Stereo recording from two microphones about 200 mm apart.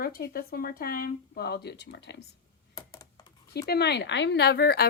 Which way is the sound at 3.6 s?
55° left (ahead or behind).